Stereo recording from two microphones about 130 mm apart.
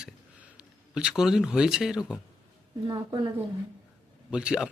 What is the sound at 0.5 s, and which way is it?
Speech, 5° right (ahead or behind).